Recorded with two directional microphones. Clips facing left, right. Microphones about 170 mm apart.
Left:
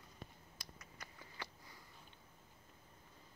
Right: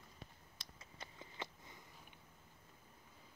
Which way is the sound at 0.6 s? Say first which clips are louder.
Right 1 dB; 25° right (ahead or behind).